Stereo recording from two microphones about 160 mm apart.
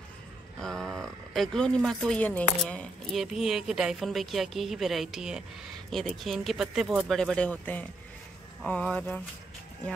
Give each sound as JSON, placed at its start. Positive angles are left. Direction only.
{"t": 0.6, "sound": "speech", "side_deg": 0}